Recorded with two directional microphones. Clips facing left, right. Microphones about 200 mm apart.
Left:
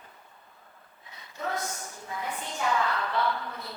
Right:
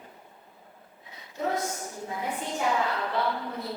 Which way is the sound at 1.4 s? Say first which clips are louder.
Right 4 dB; 10° right (ahead or behind).